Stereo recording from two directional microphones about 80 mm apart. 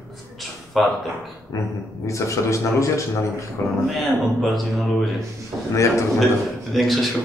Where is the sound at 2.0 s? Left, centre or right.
Left.